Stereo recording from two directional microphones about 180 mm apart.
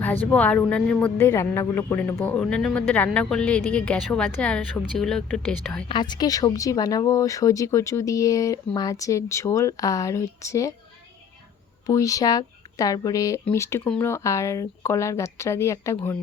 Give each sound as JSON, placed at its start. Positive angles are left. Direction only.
{"t": 0.0, "sound": "speech", "side_deg": 10}
{"t": 5.9, "sound": "speech", "side_deg": 25}
{"t": 11.9, "sound": "speech", "side_deg": 20}